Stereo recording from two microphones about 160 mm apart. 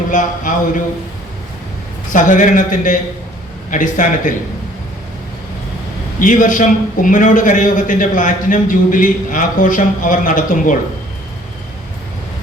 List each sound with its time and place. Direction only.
0.1 s a man's voice: 55° left (ahead or behind)
2.1 s a man's voice: 55° left (ahead or behind)
6.1 s a man's voice: 55° left (ahead or behind)